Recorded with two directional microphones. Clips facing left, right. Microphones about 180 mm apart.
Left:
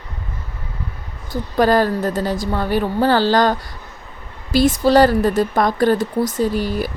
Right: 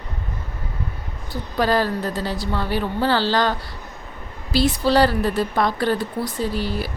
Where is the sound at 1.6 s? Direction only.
45° left (ahead or behind).